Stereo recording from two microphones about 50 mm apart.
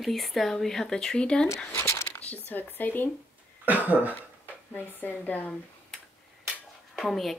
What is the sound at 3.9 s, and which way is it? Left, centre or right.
Speech, right.